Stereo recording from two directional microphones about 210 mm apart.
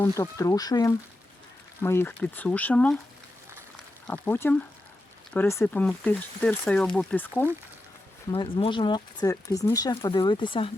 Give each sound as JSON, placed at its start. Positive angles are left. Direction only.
{"t": 0.0, "sound": "speech", "side_deg": 15}
{"t": 4.0, "sound": "speech", "side_deg": 5}
{"t": 8.3, "sound": "speech", "side_deg": 25}